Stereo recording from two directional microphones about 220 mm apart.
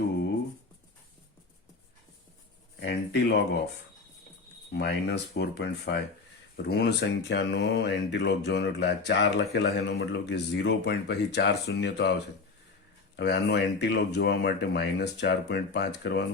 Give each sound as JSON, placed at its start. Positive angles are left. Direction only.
{"t": 2.8, "sound": "speech", "side_deg": 45}
{"t": 4.7, "sound": "speech", "side_deg": 50}
{"t": 13.1, "sound": "speech", "side_deg": 50}